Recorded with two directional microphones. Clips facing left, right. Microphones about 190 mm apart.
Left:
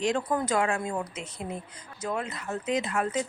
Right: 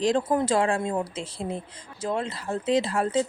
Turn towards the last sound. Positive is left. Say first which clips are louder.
# right 4 dB
turn(degrees=-30)  # may be behind; listen again after turning